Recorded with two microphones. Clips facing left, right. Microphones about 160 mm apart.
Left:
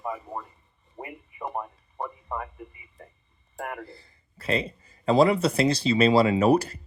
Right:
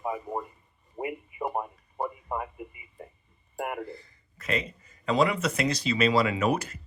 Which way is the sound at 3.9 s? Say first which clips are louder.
Right 6 dB; 30° left (ahead or behind).